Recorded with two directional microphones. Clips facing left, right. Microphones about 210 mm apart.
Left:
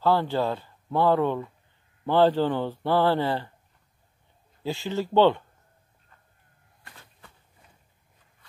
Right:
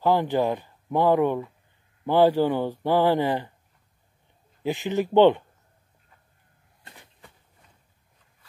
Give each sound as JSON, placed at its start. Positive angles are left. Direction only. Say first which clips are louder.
{"t": 0.0, "sound": "a man's voice", "louder": "right 2 dB", "side_deg": -15}
{"t": 4.6, "sound": "a man's voice", "louder": "right 3 dB", "side_deg": -15}
{"t": 6.8, "sound": "a sound", "louder": "right 2 dB", "side_deg": -20}